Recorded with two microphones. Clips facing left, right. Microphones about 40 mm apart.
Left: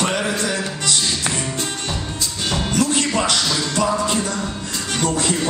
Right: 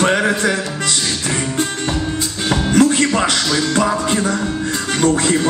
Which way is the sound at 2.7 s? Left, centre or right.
Right.